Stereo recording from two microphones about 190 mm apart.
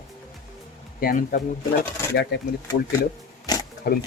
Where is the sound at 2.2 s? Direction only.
60° left (ahead or behind).